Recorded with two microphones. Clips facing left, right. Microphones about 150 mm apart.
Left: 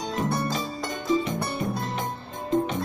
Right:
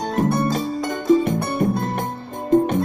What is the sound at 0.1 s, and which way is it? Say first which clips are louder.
Music: right 7 dB; 55° right (ahead or behind).